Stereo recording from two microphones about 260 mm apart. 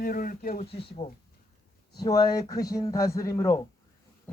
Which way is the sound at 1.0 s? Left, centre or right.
Left.